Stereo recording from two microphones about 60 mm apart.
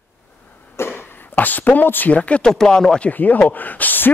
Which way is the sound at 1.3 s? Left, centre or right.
Left.